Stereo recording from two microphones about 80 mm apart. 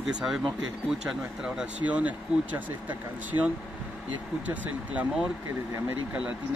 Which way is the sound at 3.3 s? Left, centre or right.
Right.